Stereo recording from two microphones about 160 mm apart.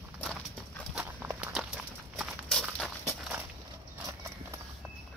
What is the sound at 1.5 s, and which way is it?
Clip-clop, centre (ahead or behind).